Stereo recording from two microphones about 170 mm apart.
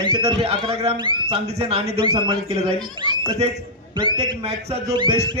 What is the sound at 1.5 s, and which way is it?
Speech, 40° right (ahead or behind).